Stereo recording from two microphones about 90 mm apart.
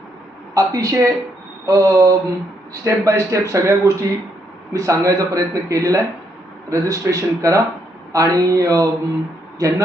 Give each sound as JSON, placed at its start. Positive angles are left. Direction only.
{"t": 0.5, "sound": "a man's voice", "side_deg": -40}